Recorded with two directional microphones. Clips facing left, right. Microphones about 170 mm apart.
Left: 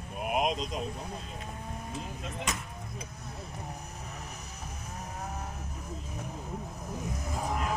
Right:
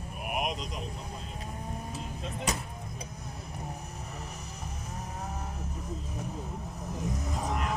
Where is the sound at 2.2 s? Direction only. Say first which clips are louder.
Right 4 dB; 35° right (ahead or behind).